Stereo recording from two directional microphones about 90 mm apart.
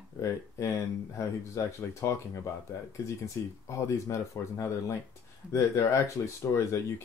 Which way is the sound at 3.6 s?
35° left (ahead or behind).